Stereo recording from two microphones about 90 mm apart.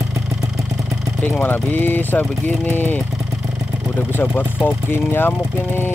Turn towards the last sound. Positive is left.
turn(degrees=25)  # may be behind; listen again after turning